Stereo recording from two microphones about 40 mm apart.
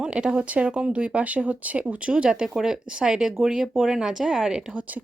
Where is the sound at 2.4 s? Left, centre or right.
Centre.